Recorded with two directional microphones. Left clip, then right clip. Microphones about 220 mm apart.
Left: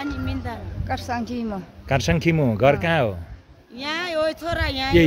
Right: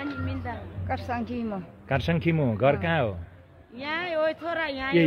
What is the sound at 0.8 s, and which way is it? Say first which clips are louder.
Speech: left 4 dB; 5° left (ahead or behind).